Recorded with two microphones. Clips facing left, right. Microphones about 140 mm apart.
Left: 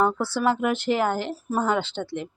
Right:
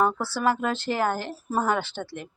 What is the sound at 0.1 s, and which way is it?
Speech, 15° left (ahead or behind).